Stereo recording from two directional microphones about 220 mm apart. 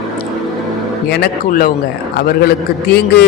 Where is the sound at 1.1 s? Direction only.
45° left (ahead or behind).